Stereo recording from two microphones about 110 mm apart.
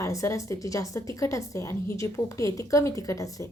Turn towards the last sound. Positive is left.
turn(degrees=30)  # may be behind; listen again after turning